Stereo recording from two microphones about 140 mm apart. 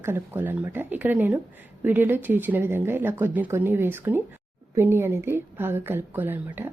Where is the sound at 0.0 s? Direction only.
15° right (ahead or behind).